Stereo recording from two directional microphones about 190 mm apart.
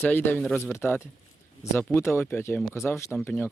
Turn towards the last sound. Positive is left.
turn(degrees=10)  # may be behind; listen again after turning